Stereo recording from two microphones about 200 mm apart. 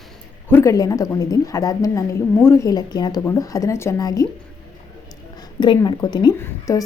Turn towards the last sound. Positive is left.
turn(degrees=15)  # may be behind; listen again after turning